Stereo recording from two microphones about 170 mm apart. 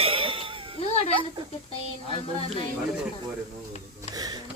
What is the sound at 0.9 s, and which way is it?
Speech, 35° left (ahead or behind).